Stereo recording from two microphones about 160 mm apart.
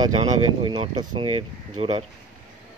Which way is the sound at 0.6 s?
30° right (ahead or behind).